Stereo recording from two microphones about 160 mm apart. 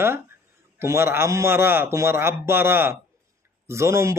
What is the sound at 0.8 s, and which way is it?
A man's voice, 15° right (ahead or behind).